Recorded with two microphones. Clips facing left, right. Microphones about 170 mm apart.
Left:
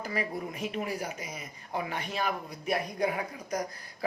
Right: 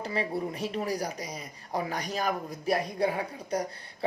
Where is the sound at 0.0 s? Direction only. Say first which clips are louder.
Right 3 dB; 30° right (ahead or behind).